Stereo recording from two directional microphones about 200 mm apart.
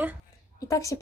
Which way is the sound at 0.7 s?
15° left (ahead or behind).